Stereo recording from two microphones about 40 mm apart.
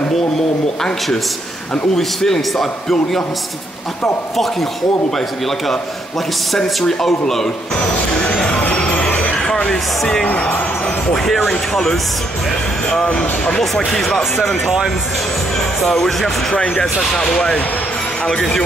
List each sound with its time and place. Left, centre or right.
2.0 s a man's voice: centre
6.5 s a man's voice: centre
8.2 s music: left
9.7 s a man's voice: centre
11.1 s speech: centre
11.7 s a man's voice: centre
13.6 s a man's voice: centre
15.8 s speech: centre
16.5 s a man's voice: centre